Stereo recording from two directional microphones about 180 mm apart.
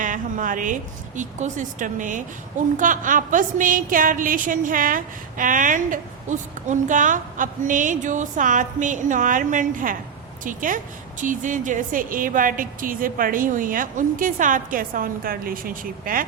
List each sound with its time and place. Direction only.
0.0 s a woman's voice: 45° right (ahead or behind)